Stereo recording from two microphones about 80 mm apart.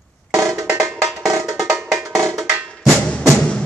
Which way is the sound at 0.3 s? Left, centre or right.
Right.